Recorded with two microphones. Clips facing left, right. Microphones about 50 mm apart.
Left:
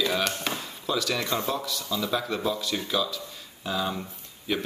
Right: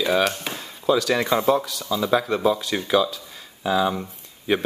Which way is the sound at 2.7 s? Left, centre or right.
Right.